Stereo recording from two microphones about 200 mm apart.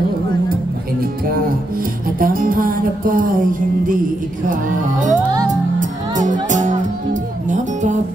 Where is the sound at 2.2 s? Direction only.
45° right (ahead or behind).